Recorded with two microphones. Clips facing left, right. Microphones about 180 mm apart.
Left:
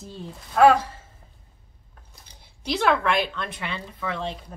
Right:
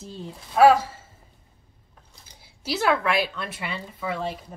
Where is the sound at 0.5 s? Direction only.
5° right (ahead or behind).